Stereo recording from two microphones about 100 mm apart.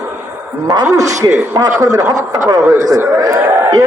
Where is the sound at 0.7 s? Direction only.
40° right (ahead or behind).